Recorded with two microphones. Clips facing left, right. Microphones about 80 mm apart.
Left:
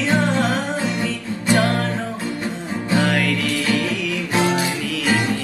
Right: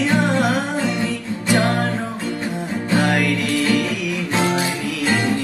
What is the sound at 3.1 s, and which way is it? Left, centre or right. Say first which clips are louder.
Music: right 1 dB; right.